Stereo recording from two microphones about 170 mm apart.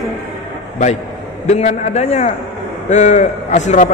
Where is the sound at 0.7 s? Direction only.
45° left (ahead or behind).